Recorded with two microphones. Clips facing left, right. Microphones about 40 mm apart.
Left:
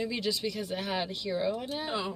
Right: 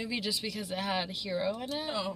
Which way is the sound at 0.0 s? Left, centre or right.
Centre.